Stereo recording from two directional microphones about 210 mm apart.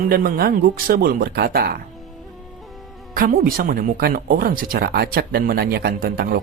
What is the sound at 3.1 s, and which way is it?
Speech, 45° right (ahead or behind).